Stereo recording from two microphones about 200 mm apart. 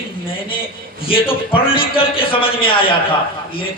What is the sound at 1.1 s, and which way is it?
A man's voice, 25° left (ahead or behind).